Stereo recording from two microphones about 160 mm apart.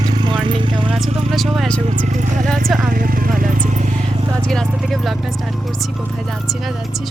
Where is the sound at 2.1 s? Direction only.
50° right (ahead or behind).